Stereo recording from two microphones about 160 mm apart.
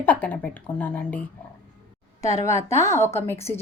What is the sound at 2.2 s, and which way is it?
Speech, 20° left (ahead or behind).